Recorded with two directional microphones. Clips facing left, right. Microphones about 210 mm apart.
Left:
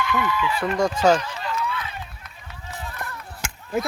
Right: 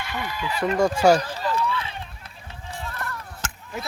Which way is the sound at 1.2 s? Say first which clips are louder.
Right 3 dB; 35° right (ahead or behind).